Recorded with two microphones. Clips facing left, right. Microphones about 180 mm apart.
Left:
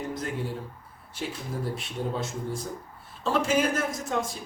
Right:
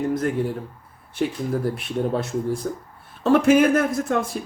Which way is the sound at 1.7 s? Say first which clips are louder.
Right 8 dB; 60° right (ahead or behind).